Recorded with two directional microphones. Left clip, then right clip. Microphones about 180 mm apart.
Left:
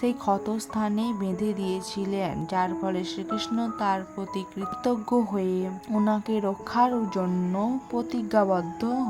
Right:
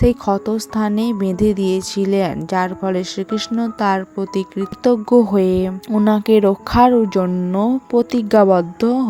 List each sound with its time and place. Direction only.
0.0 s speech: 35° right (ahead or behind)